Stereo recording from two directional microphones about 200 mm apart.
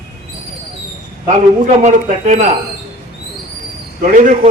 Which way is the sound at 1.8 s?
35° right (ahead or behind).